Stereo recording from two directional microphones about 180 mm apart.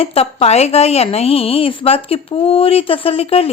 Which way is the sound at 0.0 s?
35° left (ahead or behind).